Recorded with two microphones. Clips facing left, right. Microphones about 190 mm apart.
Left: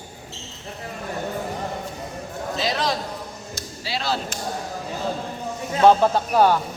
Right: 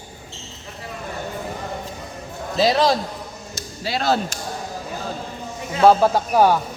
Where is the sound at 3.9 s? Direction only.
50° right (ahead or behind).